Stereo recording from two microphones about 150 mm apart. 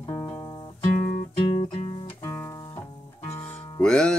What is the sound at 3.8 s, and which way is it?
Music, 5° left (ahead or behind).